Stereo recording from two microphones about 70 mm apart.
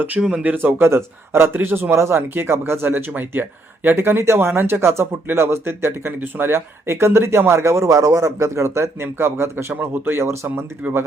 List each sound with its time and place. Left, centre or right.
0.2 s speech: centre
0.5 s speech: right